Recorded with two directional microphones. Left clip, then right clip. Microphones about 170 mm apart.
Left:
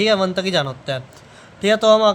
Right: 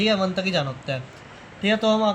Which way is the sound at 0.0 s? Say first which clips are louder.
Left 5 dB; 45° left (ahead or behind).